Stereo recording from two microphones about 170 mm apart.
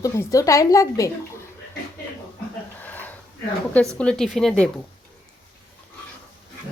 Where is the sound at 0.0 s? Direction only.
20° left (ahead or behind).